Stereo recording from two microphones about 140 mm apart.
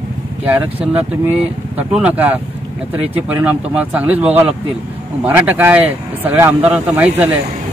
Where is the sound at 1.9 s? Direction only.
10° right (ahead or behind).